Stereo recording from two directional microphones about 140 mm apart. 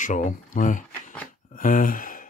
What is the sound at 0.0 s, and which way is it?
Speech, 65° left (ahead or behind).